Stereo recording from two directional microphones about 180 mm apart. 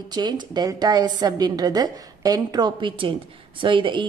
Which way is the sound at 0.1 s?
25° right (ahead or behind).